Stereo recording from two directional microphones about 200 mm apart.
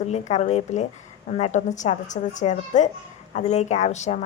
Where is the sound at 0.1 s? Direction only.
35° left (ahead or behind).